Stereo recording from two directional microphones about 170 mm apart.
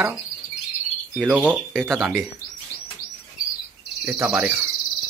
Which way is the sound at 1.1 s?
5° right (ahead or behind).